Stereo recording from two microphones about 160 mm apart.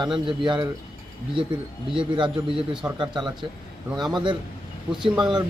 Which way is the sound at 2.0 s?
30° right (ahead or behind).